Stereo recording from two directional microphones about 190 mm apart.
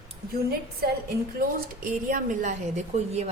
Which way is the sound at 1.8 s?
45° right (ahead or behind).